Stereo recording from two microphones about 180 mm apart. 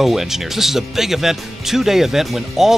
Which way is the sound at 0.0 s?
Centre (ahead or behind).